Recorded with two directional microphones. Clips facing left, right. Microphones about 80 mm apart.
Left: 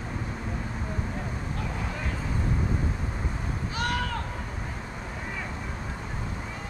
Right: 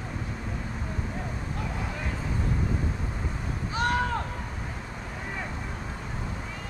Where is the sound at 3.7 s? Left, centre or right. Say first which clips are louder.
Right 4 dB; right.